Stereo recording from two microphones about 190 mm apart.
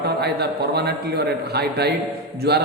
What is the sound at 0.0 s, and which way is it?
A man's voice, 60° right (ahead or behind).